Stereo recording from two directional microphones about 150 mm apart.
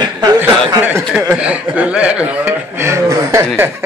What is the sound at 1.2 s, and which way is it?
Speech, 10° right (ahead or behind).